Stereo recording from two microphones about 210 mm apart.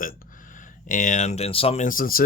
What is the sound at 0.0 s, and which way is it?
Speech, 40° left (ahead or behind).